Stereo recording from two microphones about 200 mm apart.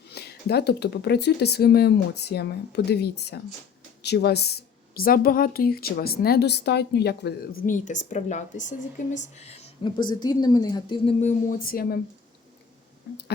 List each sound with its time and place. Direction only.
0.1 s speech: 55° left (ahead or behind)
7.7 s a woman's voice: 40° left (ahead or behind)